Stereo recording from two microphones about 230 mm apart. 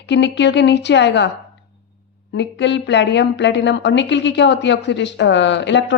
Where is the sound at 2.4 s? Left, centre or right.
Left.